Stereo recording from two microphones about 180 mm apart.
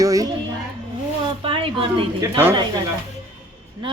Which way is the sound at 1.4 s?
30° right (ahead or behind).